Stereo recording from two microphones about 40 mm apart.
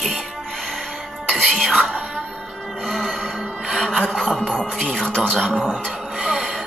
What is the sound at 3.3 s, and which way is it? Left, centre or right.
Music, centre.